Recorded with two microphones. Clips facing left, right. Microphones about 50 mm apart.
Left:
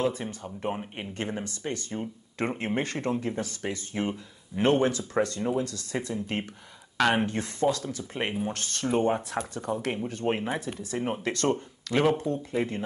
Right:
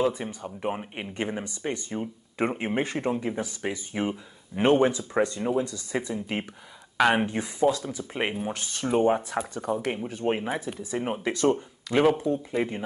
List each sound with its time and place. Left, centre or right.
0.0 s speech: centre